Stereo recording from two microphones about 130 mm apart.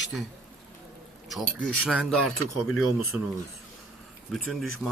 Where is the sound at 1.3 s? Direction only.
5° left (ahead or behind).